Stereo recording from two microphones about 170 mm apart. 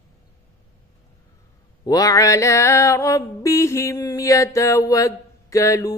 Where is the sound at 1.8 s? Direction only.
20° left (ahead or behind).